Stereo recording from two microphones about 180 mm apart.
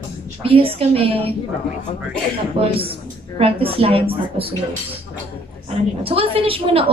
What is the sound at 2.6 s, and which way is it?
A woman's voice, 30° right (ahead or behind).